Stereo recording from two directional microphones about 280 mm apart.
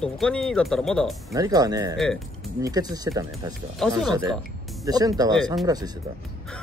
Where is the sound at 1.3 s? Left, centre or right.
Centre.